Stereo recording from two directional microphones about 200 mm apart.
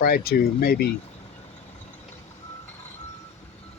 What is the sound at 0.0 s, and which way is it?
Speech, 50° left (ahead or behind).